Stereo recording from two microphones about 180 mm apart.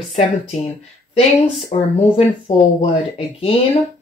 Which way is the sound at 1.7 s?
40° left (ahead or behind).